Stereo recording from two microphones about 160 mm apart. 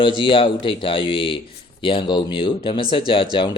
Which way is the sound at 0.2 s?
30° left (ahead or behind).